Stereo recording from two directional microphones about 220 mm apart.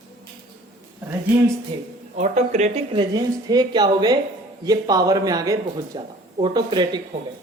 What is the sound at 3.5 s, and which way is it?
A man's voice, 20° right (ahead or behind).